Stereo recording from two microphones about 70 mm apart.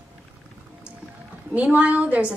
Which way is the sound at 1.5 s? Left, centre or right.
Centre.